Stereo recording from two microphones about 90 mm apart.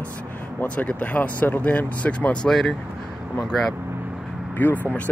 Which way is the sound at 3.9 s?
20° right (ahead or behind).